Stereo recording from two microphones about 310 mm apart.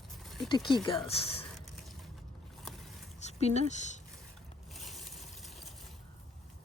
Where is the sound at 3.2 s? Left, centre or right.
Left.